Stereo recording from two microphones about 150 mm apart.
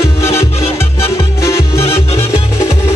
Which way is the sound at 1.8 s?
40° left (ahead or behind).